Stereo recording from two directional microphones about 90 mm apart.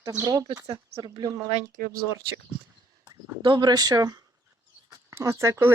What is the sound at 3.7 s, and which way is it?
Speech, 45° right (ahead or behind).